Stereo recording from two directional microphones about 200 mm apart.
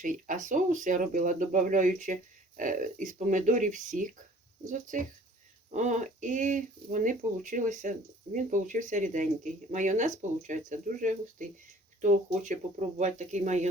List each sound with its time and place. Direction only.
0.0 s speech: 40° right (ahead or behind)